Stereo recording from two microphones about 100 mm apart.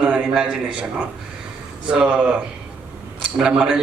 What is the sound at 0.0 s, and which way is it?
A man's voice, 10° right (ahead or behind).